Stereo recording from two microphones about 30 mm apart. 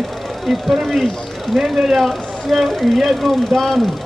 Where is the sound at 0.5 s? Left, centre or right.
Centre.